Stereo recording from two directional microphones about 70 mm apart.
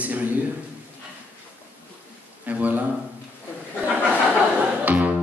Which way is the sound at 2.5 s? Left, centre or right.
Right.